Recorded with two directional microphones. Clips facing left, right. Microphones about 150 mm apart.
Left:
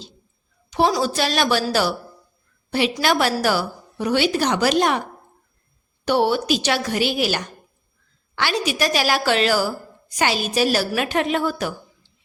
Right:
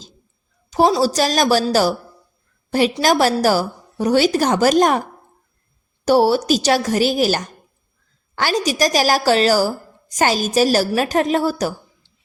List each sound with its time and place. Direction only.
0.7 s a woman's voice: 35° right (ahead or behind)
6.1 s a woman's voice: 40° right (ahead or behind)